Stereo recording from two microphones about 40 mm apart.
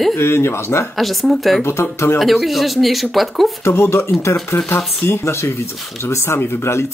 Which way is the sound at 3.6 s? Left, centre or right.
Left.